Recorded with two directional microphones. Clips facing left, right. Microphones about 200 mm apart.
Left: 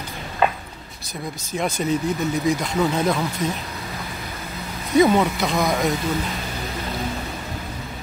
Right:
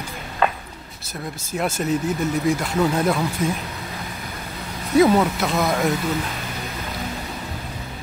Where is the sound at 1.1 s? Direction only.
5° right (ahead or behind).